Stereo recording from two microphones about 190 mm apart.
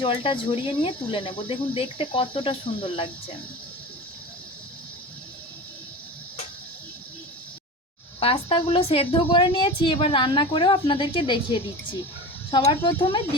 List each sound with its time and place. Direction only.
0.0 s a woman's voice: 25° left (ahead or behind)
8.2 s a woman's voice: 30° left (ahead or behind)